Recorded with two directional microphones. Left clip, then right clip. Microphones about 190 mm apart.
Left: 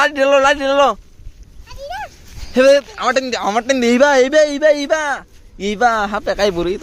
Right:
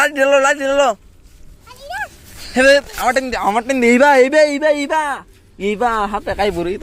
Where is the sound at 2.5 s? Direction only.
10° left (ahead or behind).